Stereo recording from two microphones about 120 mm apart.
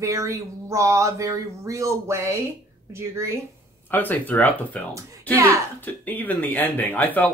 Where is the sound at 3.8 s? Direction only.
15° left (ahead or behind).